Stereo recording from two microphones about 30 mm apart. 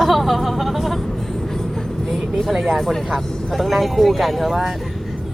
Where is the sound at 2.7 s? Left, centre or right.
Centre.